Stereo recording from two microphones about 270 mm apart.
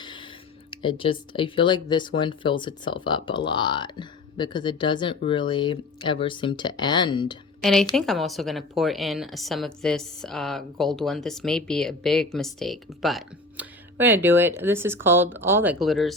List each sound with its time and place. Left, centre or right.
0.0 s a sound: centre
0.7 s speech: centre
7.6 s a woman's voice: centre